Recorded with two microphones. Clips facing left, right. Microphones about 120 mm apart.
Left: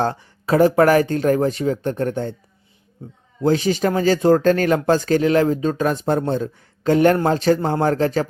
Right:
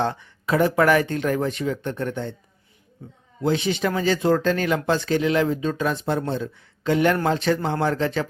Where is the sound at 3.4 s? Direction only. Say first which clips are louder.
Left 4 dB; 40° left (ahead or behind).